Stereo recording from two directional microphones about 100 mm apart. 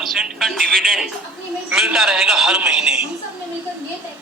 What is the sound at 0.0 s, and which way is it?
Music, 5° right (ahead or behind).